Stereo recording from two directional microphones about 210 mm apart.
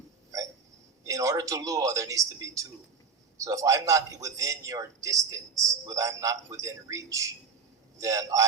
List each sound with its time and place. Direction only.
1.0 s a man's voice: 15° right (ahead or behind)